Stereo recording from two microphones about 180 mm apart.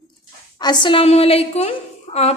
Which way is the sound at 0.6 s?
25° left (ahead or behind).